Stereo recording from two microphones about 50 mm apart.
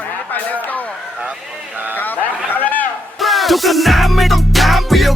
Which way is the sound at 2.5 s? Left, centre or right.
Left.